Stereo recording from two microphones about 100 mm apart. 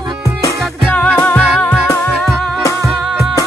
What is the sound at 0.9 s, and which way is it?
Music, 10° left (ahead or behind).